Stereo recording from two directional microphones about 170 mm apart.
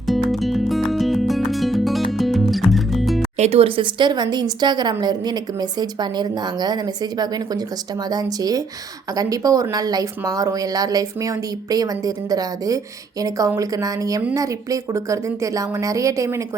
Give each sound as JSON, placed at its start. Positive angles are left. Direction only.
{"t": 0.1, "sound": "music", "side_deg": 0}
{"t": 3.3, "sound": "speech", "side_deg": -40}